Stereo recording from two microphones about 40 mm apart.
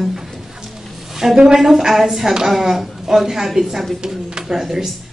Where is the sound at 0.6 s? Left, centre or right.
Centre.